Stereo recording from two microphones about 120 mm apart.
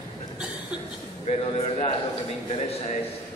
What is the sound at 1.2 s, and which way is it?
Speech, 55° left (ahead or behind).